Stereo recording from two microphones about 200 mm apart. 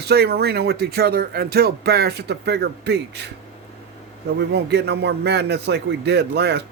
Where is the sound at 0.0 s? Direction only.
55° right (ahead or behind).